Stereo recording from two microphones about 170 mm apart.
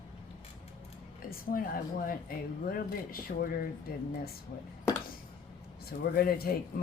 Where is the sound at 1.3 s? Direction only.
55° left (ahead or behind).